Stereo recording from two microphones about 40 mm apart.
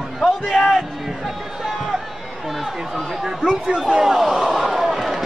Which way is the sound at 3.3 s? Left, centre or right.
Centre.